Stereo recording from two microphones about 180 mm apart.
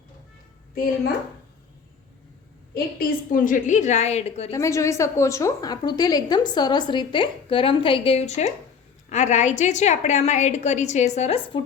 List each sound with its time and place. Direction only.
2.7 s a woman's voice: 55° left (ahead or behind); by 4.5 s 35° left (ahead or behind)
4.5 s a woman's voice: 15° left (ahead or behind)